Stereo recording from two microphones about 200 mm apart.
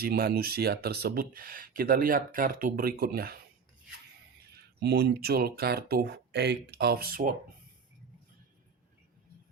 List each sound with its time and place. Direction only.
0.0 s speech: 50° right (ahead or behind)
4.5 s speech: 55° right (ahead or behind)